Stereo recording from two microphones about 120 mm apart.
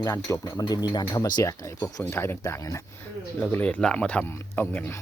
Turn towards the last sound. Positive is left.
turn(degrees=20)  # may be behind; listen again after turning